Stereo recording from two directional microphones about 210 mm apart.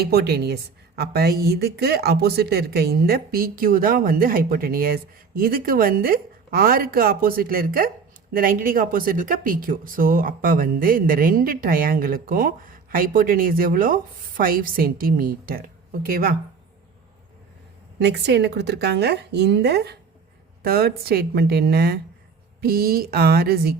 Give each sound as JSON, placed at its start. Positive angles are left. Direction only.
{"t": 0.0, "sound": "a woman's voice", "side_deg": -50}
{"t": 18.0, "sound": "a woman's voice", "side_deg": -55}